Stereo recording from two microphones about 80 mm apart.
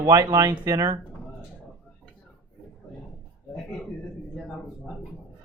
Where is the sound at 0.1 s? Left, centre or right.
Right.